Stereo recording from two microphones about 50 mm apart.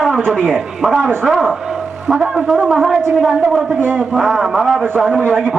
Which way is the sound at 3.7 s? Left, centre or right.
Right.